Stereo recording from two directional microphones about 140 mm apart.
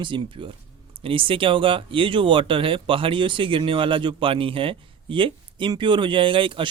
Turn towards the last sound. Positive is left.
turn(degrees=-35)  # may be behind; listen again after turning